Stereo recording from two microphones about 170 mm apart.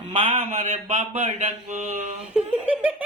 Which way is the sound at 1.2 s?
50° right (ahead or behind).